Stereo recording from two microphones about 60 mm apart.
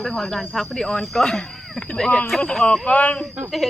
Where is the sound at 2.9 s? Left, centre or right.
Left.